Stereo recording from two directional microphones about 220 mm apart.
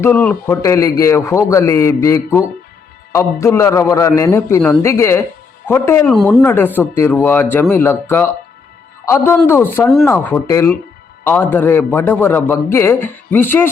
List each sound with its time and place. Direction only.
0.0 s speech: 10° left (ahead or behind)